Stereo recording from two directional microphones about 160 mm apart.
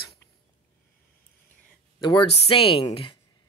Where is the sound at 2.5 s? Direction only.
35° left (ahead or behind).